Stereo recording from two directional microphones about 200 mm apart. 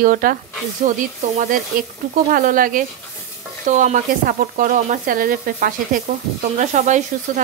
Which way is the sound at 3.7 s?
40° right (ahead or behind).